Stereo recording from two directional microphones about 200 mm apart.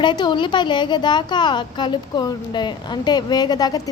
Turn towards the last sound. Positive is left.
turn(degrees=20)  # may be behind; listen again after turning